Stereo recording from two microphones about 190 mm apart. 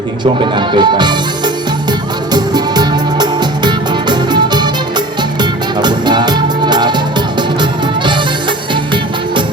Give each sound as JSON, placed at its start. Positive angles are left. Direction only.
{"t": 0.3, "sound": "speech", "side_deg": -25}
{"t": 2.3, "sound": "music", "side_deg": -20}